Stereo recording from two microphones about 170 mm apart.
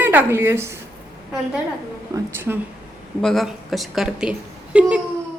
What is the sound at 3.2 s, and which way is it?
A woman's voice, centre (ahead or behind).